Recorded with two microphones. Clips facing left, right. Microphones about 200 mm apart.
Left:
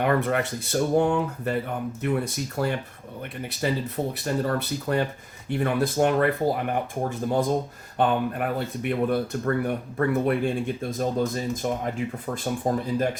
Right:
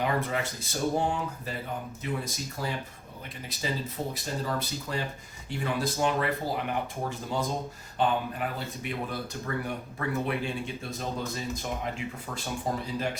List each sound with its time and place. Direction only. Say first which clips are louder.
0.0 s speech: left 6 dB; 60° left (ahead or behind)